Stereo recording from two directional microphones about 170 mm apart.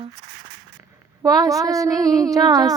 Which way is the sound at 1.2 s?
20° right (ahead or behind).